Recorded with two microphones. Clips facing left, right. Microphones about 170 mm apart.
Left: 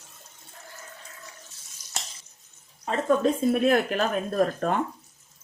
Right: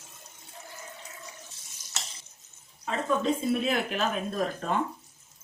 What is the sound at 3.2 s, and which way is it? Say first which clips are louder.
Speech: left 5 dB; 50° left (ahead or behind).